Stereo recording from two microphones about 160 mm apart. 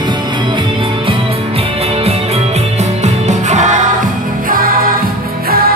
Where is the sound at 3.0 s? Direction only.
45° right (ahead or behind).